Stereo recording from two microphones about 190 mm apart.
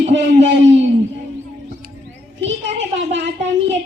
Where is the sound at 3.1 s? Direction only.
70° right (ahead or behind).